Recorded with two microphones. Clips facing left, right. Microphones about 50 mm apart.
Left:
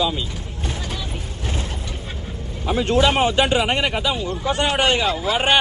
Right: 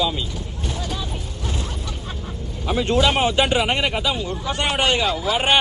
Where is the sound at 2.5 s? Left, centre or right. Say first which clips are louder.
Left 1 dB; left.